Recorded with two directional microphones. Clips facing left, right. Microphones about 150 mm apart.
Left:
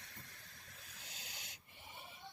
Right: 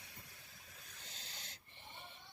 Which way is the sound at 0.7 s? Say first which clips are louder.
Even; centre (ahead or behind).